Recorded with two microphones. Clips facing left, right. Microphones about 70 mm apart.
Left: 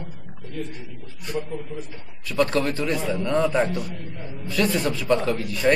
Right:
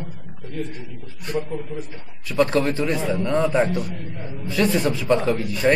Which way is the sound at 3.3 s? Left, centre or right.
Centre.